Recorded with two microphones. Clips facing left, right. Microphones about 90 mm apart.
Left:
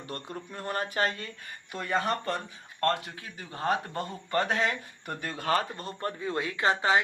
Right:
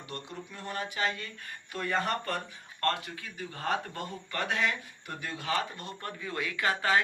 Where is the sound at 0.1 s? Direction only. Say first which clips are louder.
Left 3 dB; 45° left (ahead or behind).